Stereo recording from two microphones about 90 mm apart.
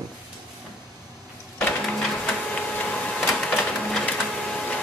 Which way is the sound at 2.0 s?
Centre (ahead or behind).